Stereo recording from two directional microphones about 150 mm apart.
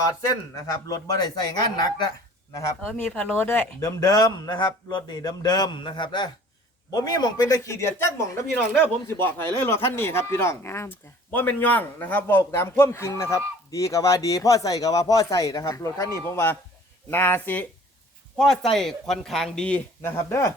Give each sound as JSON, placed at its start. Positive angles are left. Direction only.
{"t": 0.7, "sound": "speech", "side_deg": 25}
{"t": 2.8, "sound": "speech", "side_deg": 10}